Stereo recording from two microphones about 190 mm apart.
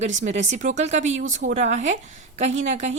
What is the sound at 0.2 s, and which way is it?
Speech, 40° right (ahead or behind).